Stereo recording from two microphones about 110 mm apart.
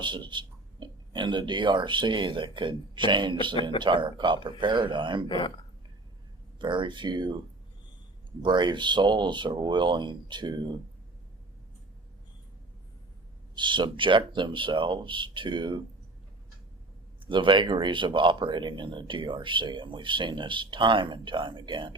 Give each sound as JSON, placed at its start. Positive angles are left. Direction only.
{"t": 0.0, "sound": "speech", "side_deg": -45}
{"t": 6.6, "sound": "speech", "side_deg": -45}
{"t": 8.4, "sound": "speech", "side_deg": -45}
{"t": 13.6, "sound": "speech", "side_deg": -45}
{"t": 17.2, "sound": "speech", "side_deg": -50}